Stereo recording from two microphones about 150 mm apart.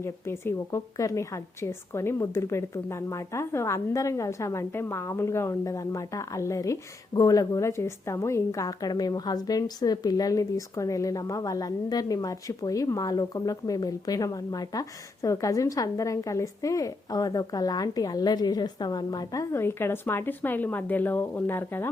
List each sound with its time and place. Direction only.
0.0 s a woman's voice: 15° left (ahead or behind)